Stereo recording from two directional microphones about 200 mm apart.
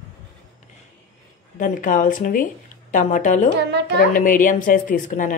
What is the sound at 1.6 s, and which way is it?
A woman's voice, 40° left (ahead or behind).